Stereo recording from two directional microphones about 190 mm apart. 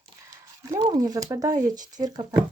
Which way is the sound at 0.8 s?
20° right (ahead or behind).